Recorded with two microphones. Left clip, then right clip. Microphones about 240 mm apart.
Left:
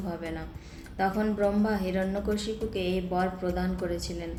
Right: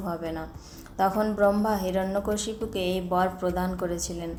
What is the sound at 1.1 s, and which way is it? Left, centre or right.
A woman's voice, centre.